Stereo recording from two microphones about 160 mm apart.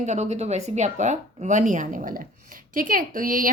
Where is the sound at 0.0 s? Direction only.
45° right (ahead or behind).